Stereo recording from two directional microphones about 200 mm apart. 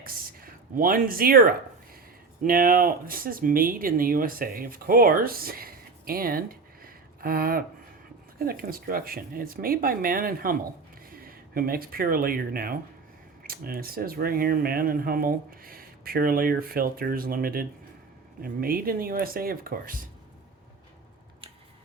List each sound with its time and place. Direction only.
0.0 s speech: 45° right (ahead or behind)